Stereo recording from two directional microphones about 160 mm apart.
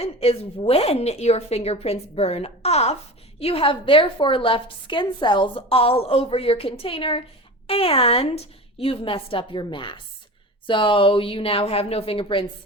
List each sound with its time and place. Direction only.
0.0 s a woman's voice: 40° left (ahead or behind)